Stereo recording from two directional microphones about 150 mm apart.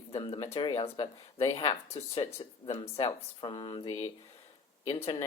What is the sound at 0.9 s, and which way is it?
Speech, 25° left (ahead or behind).